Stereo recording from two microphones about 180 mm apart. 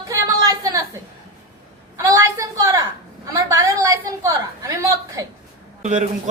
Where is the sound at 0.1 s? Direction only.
15° right (ahead or behind).